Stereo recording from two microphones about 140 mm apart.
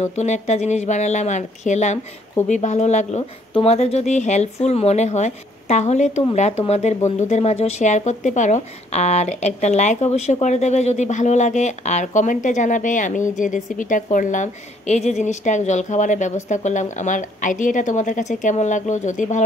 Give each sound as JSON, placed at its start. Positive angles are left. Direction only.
{"t": 0.0, "sound": "speech", "side_deg": 55}